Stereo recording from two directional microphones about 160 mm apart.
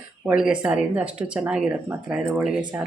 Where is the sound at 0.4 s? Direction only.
5° right (ahead or behind).